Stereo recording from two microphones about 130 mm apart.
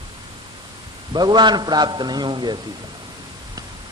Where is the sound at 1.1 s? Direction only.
35° right (ahead or behind).